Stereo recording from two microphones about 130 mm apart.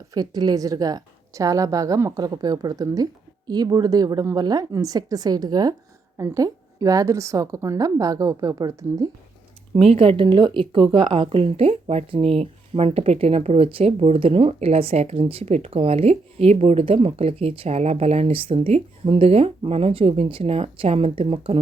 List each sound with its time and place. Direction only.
0.1 s a woman's voice: 30° right (ahead or behind)
9.9 s a woman's voice: 45° right (ahead or behind)